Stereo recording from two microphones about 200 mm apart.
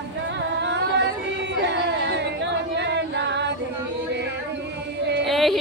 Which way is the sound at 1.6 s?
55° right (ahead or behind).